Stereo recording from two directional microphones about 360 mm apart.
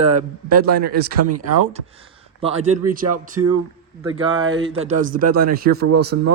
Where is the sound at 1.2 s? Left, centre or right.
Right.